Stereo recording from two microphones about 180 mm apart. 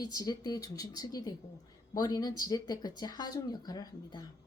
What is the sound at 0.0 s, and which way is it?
A woman's voice, 20° left (ahead or behind).